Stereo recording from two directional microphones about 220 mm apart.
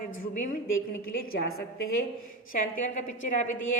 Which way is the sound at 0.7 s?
70° left (ahead or behind).